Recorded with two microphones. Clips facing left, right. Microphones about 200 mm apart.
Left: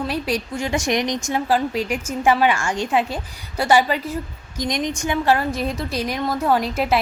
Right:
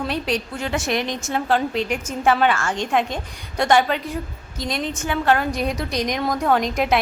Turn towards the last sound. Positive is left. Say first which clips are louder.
# even
turn(degrees=5)  # may be behind; listen again after turning